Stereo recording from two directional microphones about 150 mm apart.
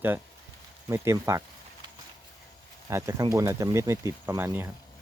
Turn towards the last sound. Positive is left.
turn(degrees=-15)  # may be behind; listen again after turning